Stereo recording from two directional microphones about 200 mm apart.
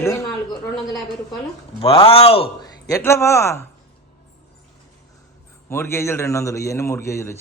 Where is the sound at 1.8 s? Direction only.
25° left (ahead or behind).